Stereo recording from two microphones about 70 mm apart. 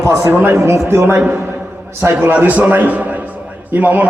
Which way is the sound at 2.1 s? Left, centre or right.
Right.